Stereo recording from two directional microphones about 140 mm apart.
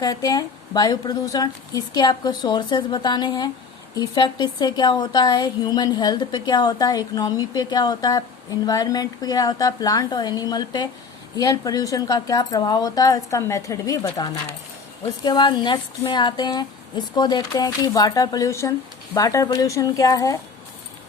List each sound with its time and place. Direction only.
0.0 s a woman's voice: 25° left (ahead or behind)